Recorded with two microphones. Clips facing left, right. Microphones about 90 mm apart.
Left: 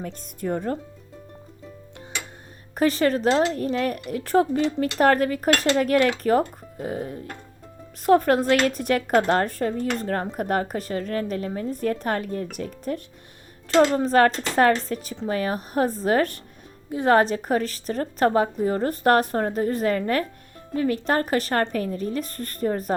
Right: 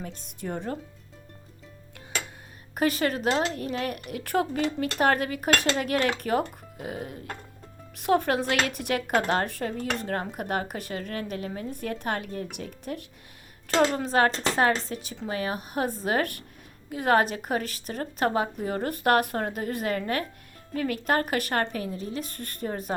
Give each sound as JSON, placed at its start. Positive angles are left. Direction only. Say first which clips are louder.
{"t": 0.0, "sound": "speech", "louder": "left 6 dB", "side_deg": 45}
{"t": 2.7, "sound": "a woman's voice", "louder": "left 5 dB", "side_deg": 35}